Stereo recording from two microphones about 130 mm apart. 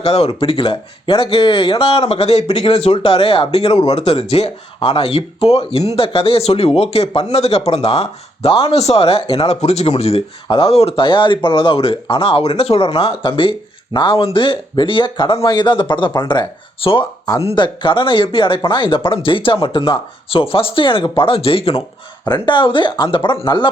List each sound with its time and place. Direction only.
0.0 s speech: 50° left (ahead or behind); by 16.5 s 35° left (ahead or behind)
16.8 s speech: 45° left (ahead or behind)
22.3 s speech: 40° left (ahead or behind)